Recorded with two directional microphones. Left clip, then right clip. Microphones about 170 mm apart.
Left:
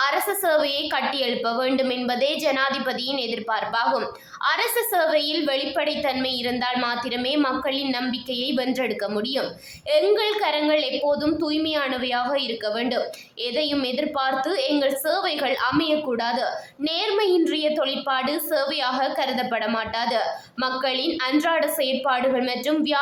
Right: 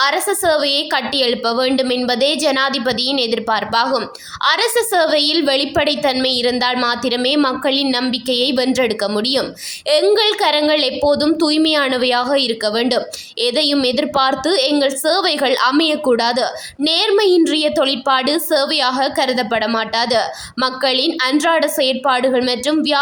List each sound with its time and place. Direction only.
0.0 s a woman's voice: 35° right (ahead or behind)